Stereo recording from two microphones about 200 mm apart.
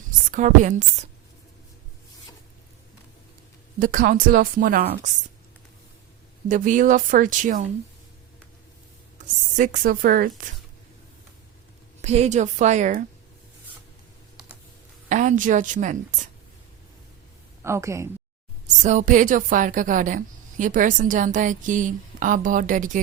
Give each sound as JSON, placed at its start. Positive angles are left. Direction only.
{"t": 0.3, "sound": "a woman's voice", "side_deg": -40}
{"t": 3.8, "sound": "a woman's voice", "side_deg": -45}
{"t": 6.5, "sound": "a woman's voice", "side_deg": -40}
{"t": 9.1, "sound": "speech", "side_deg": -40}
{"t": 12.0, "sound": "a woman's voice", "side_deg": -35}
{"t": 15.1, "sound": "a woman's voice", "side_deg": -40}
{"t": 17.6, "sound": "a woman's voice", "side_deg": -15}
{"t": 18.8, "sound": "a woman's voice", "side_deg": -40}